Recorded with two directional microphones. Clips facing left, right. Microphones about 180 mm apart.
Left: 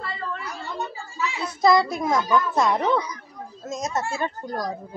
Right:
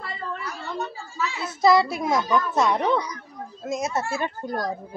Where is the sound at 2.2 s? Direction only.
5° left (ahead or behind).